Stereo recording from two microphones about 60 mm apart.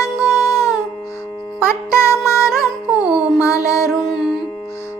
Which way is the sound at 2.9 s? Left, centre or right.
Centre.